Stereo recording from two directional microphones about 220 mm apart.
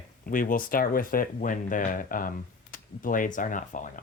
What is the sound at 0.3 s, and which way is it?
Speech, 40° left (ahead or behind).